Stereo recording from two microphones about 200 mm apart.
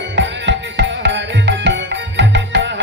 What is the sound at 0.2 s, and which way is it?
Music, 60° right (ahead or behind).